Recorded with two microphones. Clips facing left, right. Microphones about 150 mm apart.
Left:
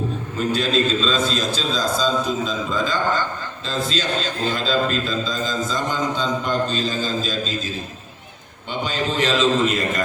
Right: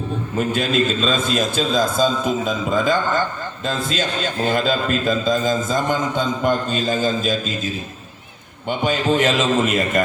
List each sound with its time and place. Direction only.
0.3 s a man's voice: 55° right (ahead or behind)
8.8 s a man's voice: 50° right (ahead or behind)